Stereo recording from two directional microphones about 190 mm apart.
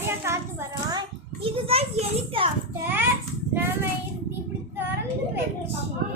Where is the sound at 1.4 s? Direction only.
30° right (ahead or behind).